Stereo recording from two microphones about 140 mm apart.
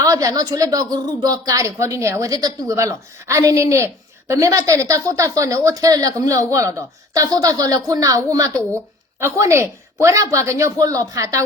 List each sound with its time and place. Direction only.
0.0 s a woman's voice: 25° right (ahead or behind)